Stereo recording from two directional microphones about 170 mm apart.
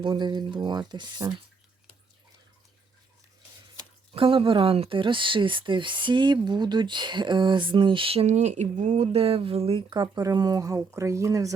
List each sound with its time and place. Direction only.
0.0 s speech: 25° right (ahead or behind)
3.8 s speech: 30° right (ahead or behind)